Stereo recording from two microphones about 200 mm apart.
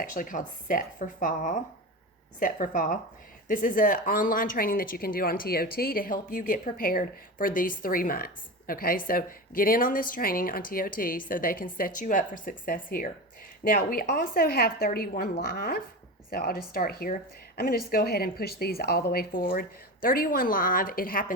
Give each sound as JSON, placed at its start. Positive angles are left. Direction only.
{"t": 0.0, "sound": "a woman's voice", "side_deg": 45}